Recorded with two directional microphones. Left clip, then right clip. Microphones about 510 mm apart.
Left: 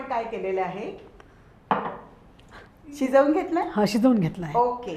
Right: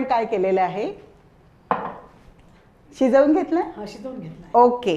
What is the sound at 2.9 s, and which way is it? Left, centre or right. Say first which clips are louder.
Speech: right 4 dB; right.